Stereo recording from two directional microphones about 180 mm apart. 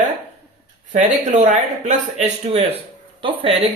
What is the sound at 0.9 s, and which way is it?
Speech, 45° right (ahead or behind).